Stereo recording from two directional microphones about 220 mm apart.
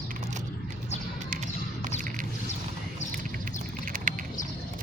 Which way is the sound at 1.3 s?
35° right (ahead or behind).